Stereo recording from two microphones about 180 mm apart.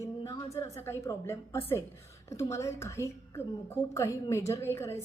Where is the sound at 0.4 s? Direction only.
15° left (ahead or behind).